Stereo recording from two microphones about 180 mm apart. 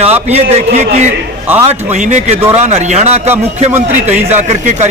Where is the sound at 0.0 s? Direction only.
35° right (ahead or behind).